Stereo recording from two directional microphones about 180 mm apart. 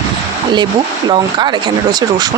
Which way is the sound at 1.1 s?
25° right (ahead or behind).